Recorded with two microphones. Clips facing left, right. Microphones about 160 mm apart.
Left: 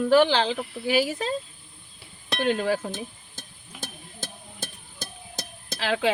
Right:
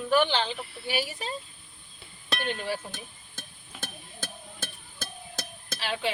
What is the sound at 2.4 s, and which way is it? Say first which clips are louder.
Speech: left 9 dB; 90° left.